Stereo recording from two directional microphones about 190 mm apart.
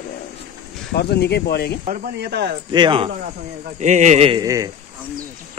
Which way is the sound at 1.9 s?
50° right (ahead or behind).